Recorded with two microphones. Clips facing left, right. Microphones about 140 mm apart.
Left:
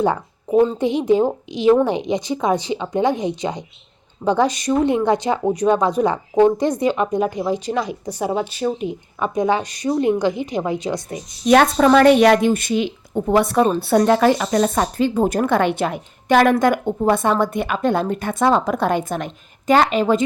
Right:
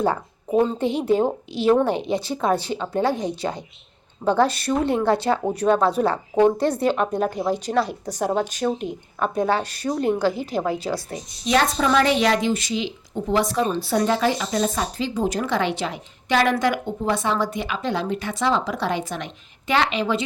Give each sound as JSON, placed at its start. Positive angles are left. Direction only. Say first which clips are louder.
{"t": 0.8, "sound": "a woman's voice", "louder": "left 3 dB", "side_deg": 15}
{"t": 10.8, "sound": "a woman's voice", "louder": "left 2 dB", "side_deg": -5}
{"t": 11.4, "sound": "speech", "louder": "left 7 dB", "side_deg": 55}